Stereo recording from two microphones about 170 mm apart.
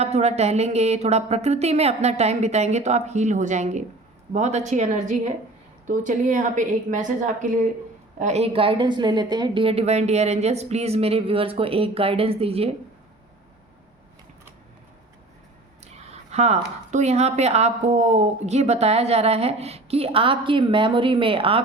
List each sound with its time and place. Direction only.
0.0 s a woman's voice: 40° right (ahead or behind)
15.8 s speech: 40° right (ahead or behind)